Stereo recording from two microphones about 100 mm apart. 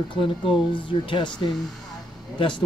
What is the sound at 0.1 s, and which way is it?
Speech, 60° left (ahead or behind).